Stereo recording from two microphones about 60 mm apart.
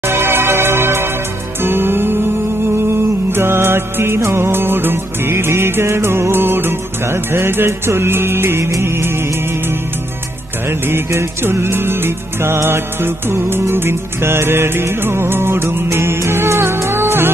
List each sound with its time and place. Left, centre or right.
0.0 s music: right
10.9 s music: right